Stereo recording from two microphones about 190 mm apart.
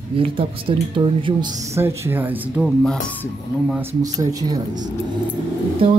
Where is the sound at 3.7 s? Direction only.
10° right (ahead or behind).